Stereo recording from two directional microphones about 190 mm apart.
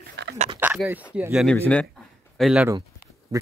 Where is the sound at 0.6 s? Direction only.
10° right (ahead or behind).